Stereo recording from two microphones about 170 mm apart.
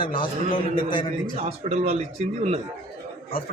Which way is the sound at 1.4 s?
40° right (ahead or behind).